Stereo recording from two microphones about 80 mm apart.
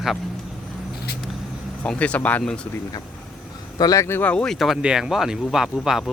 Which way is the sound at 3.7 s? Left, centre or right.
Left.